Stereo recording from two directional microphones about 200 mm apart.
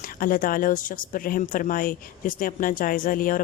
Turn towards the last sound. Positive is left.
turn(degrees=45)  # may be behind; listen again after turning